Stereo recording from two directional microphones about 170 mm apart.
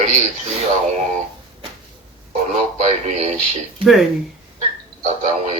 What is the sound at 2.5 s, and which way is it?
Speech, 45° right (ahead or behind).